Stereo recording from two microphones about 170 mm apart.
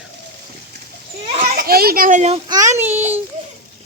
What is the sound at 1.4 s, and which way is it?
Children playing, 60° right (ahead or behind).